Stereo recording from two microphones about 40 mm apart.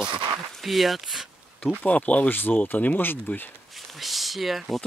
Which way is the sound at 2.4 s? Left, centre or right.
Left.